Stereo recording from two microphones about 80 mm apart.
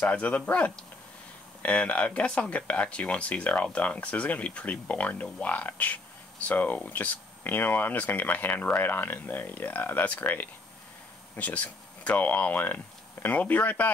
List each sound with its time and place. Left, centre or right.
0.0 s speech: centre